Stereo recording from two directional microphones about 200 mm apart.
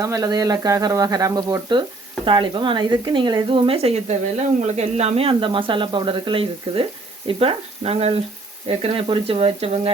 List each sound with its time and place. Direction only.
0.0 s speech: 15° right (ahead or behind)